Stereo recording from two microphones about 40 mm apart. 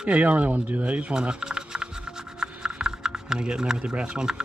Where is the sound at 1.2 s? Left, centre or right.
Right.